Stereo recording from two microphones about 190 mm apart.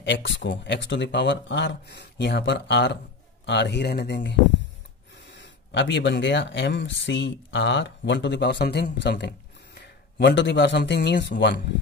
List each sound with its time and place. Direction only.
0.0 s a man's voice: 75° left (ahead or behind)